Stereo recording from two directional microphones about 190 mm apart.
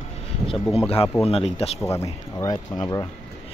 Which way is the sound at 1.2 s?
30° left (ahead or behind).